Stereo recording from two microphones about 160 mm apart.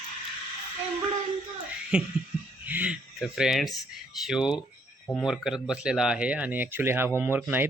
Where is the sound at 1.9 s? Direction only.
5° right (ahead or behind).